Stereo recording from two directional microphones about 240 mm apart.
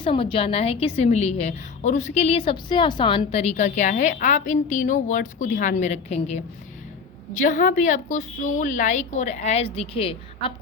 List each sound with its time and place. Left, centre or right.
0.0 s a woman's voice: left